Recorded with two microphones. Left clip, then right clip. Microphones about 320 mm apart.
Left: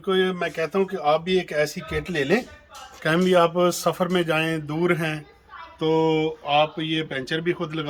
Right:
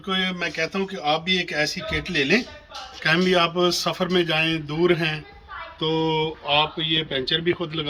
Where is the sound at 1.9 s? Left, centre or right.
Left.